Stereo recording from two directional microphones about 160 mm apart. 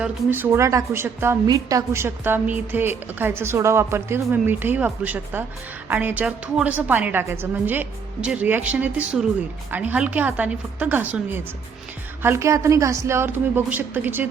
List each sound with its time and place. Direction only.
0.0 s a woman's voice: 10° right (ahead or behind)